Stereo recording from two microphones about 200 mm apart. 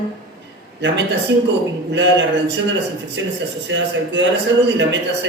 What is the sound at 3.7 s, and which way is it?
Speech, 65° right (ahead or behind).